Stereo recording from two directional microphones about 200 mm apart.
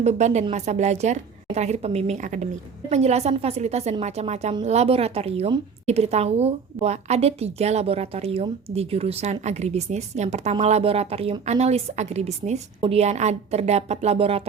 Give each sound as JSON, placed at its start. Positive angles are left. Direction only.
{"t": 0.0, "sound": "a woman's voice", "side_deg": -35}